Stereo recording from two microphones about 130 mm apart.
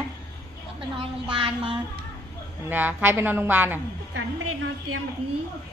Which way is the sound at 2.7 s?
15° right (ahead or behind).